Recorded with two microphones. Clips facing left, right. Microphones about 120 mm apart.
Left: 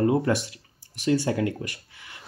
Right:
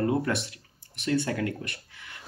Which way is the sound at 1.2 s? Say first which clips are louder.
Left 4 dB; 20° left (ahead or behind).